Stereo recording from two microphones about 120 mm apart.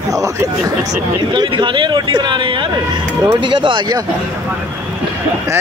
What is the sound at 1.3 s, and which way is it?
Speech, 40° right (ahead or behind).